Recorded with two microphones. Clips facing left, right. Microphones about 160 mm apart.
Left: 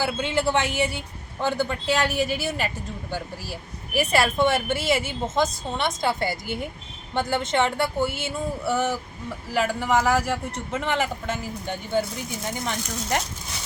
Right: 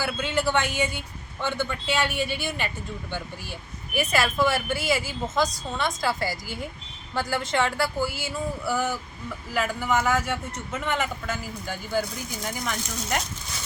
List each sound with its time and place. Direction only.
0.0 s speech: 25° left (ahead or behind)